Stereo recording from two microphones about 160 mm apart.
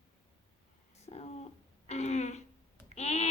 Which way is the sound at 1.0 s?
40° left (ahead or behind).